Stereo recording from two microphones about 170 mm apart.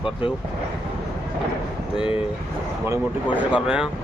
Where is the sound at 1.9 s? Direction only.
5° right (ahead or behind).